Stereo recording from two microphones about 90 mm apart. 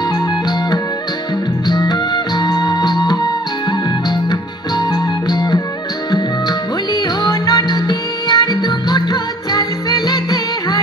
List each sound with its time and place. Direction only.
1.7 s music: 50° left (ahead or behind)
6.9 s music: 45° left (ahead or behind)